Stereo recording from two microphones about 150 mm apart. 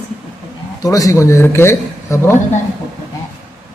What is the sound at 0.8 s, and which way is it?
A man's voice, 20° left (ahead or behind).